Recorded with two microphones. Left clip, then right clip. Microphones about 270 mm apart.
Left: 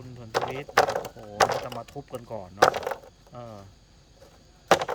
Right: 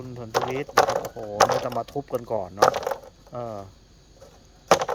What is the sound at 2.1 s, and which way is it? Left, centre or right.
Speech, right.